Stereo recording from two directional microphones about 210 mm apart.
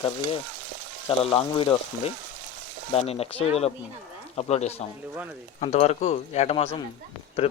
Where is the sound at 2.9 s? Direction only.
30° left (ahead or behind).